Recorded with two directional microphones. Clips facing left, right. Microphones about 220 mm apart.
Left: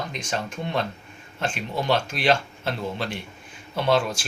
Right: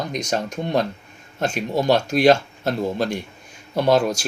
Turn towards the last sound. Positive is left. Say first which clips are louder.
# right 5 dB
turn(degrees=-40)  # may be behind; listen again after turning